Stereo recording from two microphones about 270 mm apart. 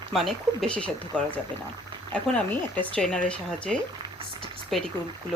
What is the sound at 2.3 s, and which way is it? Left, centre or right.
Speech, centre.